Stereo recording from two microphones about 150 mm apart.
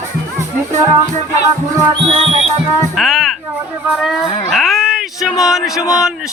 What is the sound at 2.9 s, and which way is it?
Speech, centre (ahead or behind).